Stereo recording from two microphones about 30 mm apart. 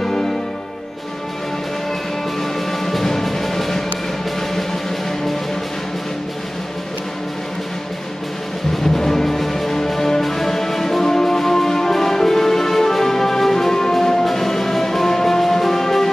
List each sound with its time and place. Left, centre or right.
0.0 s music: centre
2.8 s music: centre
8.8 s music: centre